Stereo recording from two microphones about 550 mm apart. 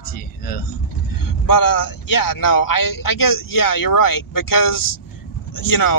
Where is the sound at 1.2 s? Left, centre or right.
Left.